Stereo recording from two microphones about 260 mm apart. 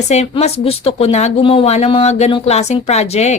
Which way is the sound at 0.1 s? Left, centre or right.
Left.